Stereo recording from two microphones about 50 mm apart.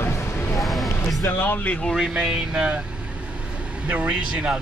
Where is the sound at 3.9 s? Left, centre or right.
Right.